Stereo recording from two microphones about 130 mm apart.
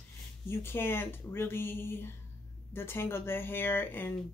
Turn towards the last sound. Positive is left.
turn(degrees=15)  # may be behind; listen again after turning